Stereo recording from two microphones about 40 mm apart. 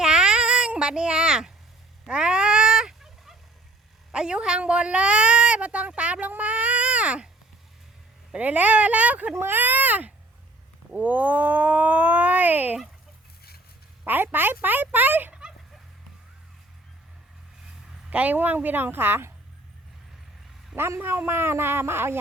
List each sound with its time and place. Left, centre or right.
0.0 s a sound: right
0.8 s a child's voice: right
2.0 s fowl: right
4.1 s speech: right
8.4 s speech: right
9.4 s speech: right
14.0 s speech: right
18.1 s speech: right
20.7 s a man's voice: right